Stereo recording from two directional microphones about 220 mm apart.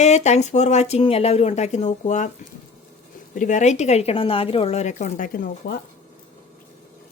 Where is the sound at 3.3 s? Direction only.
35° left (ahead or behind).